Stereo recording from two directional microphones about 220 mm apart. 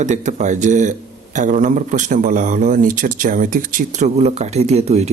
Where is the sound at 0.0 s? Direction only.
35° right (ahead or behind).